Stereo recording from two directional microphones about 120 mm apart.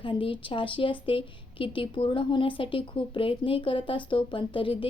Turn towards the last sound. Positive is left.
turn(degrees=45)  # may be behind; listen again after turning